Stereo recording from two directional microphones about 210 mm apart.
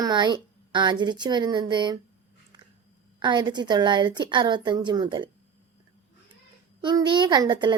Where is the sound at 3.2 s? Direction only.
20° right (ahead or behind).